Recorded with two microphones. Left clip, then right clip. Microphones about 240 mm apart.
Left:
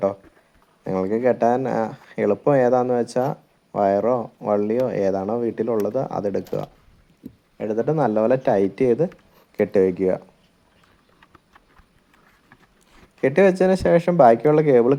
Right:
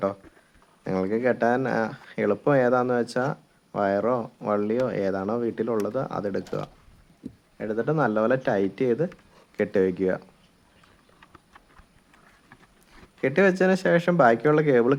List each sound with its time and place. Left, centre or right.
0.0 s a sound: centre
0.9 s speech: centre
7.2 s a sound: centre
7.6 s speech: centre
11.2 s clip-clop: centre
12.5 s speech: centre